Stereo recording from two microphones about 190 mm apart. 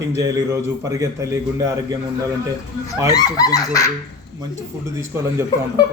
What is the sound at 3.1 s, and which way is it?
Speech, 20° left (ahead or behind).